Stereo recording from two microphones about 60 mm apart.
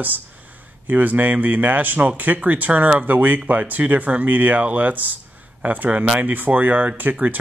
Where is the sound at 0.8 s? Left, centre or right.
Right.